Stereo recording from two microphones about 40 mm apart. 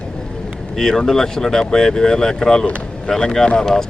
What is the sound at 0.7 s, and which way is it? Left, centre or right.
Speech, centre.